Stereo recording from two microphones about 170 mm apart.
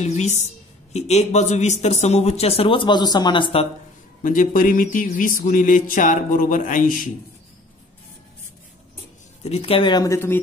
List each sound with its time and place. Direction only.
0.0 s speech: 45° left (ahead or behind)
4.2 s speech: 50° left (ahead or behind)
9.4 s speech: 35° left (ahead or behind); by 10.4 s 15° left (ahead or behind)